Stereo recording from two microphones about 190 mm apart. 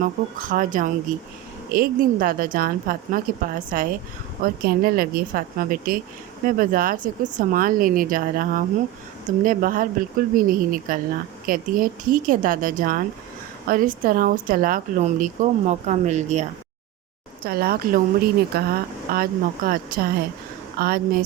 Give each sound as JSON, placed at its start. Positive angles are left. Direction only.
{"t": 0.0, "sound": "speech", "side_deg": -45}
{"t": 17.4, "sound": "speech", "side_deg": -55}